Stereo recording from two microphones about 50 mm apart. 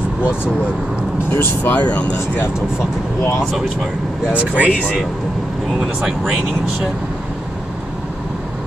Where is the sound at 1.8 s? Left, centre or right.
Left.